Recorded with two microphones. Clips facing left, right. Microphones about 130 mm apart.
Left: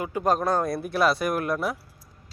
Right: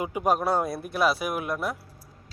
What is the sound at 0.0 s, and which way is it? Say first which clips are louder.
Speech: left 1 dB; 15° right (ahead or behind).